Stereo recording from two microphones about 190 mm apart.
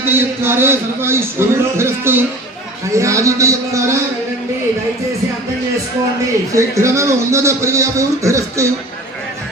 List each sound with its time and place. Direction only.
0.0 s a man's voice: 10° right (ahead or behind)
6.5 s a man's voice: 15° right (ahead or behind)